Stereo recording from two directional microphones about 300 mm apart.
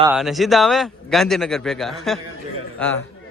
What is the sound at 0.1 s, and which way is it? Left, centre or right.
A man's voice, centre.